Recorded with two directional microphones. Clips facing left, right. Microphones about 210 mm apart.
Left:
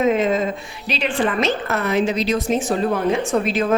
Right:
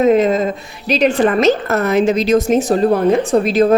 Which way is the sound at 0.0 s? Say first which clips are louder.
Right 5 dB; 40° right (ahead or behind).